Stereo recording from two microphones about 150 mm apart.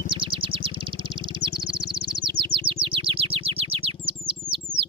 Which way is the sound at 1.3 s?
35° right (ahead or behind).